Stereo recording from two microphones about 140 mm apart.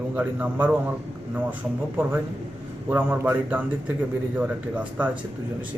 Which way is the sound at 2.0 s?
15° right (ahead or behind).